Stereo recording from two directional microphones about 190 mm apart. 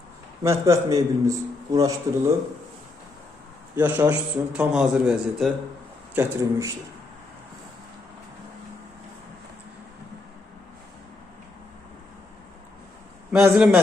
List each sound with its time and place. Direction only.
0.4 s a man's voice: 15° right (ahead or behind)
3.8 s a man's voice: 10° right (ahead or behind)
6.1 s a man's voice: 15° right (ahead or behind)
13.3 s a man's voice: centre (ahead or behind)